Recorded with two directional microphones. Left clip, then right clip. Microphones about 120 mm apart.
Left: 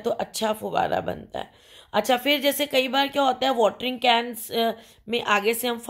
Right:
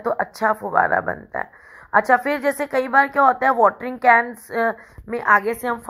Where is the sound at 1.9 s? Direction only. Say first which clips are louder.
Right 5 dB; 45° left (ahead or behind).